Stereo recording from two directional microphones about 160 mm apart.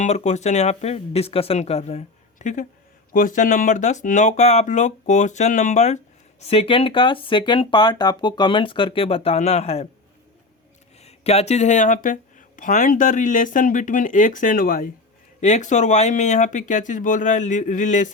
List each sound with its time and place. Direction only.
0.0 s speech: 45° left (ahead or behind)
11.0 s speech: 40° left (ahead or behind); by 14.8 s 65° left (ahead or behind)
15.4 s speech: 50° left (ahead or behind)